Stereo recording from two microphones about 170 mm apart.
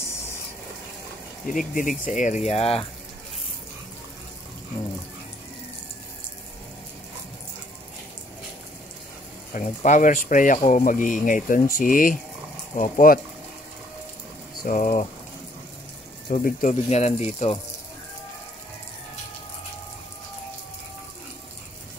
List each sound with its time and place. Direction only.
0.0 s a sound: 15° left (ahead or behind)
1.8 s speech: 50° left (ahead or behind)
9.5 s speech: 50° left (ahead or behind)
14.6 s speech: 50° left (ahead or behind)
16.3 s speech: 50° left (ahead or behind)